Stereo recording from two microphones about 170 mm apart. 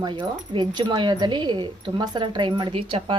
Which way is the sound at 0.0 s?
30° right (ahead or behind).